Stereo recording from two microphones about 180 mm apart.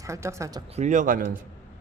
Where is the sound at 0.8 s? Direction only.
40° right (ahead or behind).